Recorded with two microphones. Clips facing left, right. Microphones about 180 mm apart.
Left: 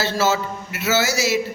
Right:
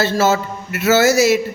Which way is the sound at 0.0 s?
50° right (ahead or behind).